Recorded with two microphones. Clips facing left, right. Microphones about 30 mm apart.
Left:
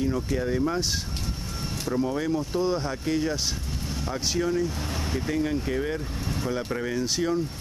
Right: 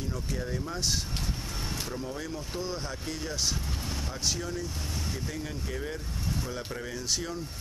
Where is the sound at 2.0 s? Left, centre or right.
Left.